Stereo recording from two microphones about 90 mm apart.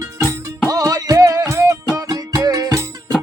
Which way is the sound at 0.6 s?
40° right (ahead or behind).